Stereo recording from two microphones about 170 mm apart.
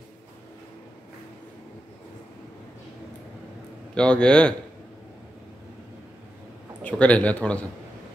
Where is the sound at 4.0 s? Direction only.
5° left (ahead or behind).